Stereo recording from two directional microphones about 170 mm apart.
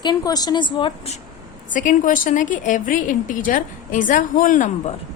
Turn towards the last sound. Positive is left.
turn(degrees=50)  # may be behind; listen again after turning